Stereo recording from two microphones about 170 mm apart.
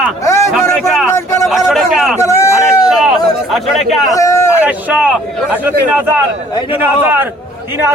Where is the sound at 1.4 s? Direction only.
Centre (ahead or behind).